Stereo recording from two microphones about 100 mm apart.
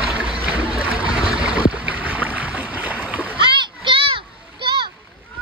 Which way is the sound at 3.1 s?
15° right (ahead or behind).